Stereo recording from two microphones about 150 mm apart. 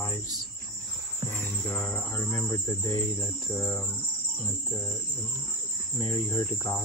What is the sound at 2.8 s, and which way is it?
Cricket, 30° left (ahead or behind).